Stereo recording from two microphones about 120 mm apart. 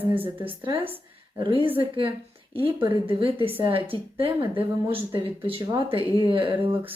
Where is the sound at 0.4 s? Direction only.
40° right (ahead or behind).